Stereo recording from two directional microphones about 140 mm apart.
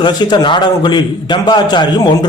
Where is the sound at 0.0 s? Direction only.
35° left (ahead or behind).